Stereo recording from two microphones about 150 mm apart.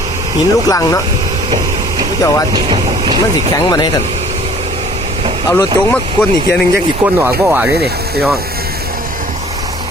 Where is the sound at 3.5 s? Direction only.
25° left (ahead or behind).